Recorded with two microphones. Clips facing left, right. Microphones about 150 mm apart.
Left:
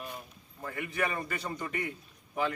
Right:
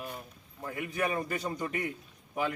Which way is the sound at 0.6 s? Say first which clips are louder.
Right 1 dB; 15° right (ahead or behind).